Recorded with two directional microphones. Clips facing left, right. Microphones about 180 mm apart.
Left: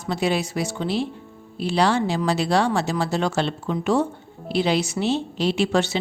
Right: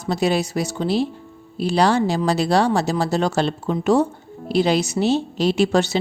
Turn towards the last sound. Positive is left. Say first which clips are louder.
# right 3 dB
turn(degrees=-40)  # may be behind; listen again after turning